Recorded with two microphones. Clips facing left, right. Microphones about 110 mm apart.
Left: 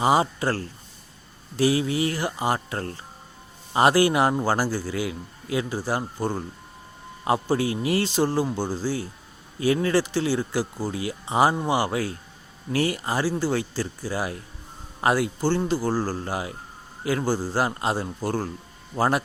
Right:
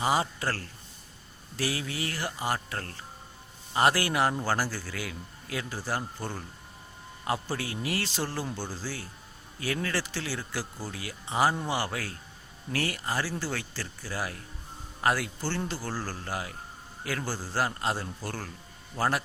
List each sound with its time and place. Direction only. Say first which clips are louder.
0.0 s a man's voice: left 7 dB; 20° left (ahead or behind)
7.5 s a man's voice: left 9 dB; 20° left (ahead or behind)